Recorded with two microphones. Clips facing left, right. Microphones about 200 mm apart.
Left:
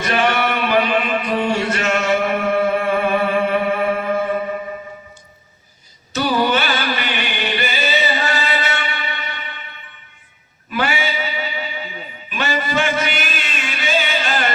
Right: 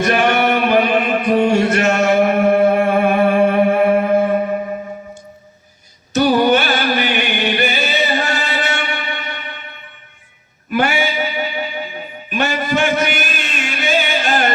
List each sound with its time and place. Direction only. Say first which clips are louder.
0.0 s music: right 4 dB; 50° right (ahead or behind)
6.1 s music: right 5 dB; 50° right (ahead or behind)
10.7 s a sound: right 4 dB; 50° right (ahead or behind)